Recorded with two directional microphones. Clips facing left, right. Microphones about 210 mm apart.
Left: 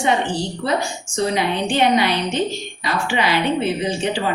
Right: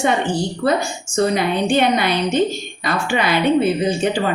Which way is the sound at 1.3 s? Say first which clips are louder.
Right 2 dB; 50° right (ahead or behind).